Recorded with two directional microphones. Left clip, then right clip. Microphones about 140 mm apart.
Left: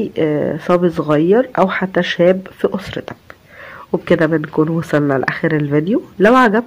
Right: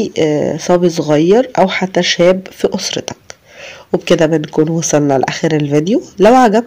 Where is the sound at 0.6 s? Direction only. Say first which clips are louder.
Right 3 dB; 15° right (ahead or behind).